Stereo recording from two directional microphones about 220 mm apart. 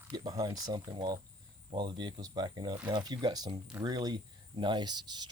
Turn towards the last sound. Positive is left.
turn(degrees=-20)  # may be behind; listen again after turning